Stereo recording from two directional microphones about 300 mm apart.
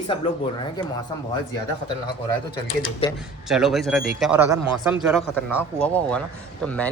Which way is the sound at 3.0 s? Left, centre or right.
Centre.